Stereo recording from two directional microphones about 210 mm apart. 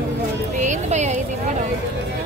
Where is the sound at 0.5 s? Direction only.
35° right (ahead or behind).